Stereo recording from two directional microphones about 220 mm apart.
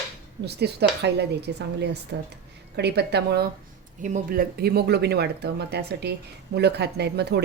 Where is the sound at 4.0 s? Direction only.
35° right (ahead or behind).